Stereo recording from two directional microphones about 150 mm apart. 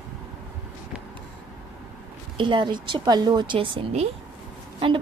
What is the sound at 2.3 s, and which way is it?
Speech, 35° right (ahead or behind).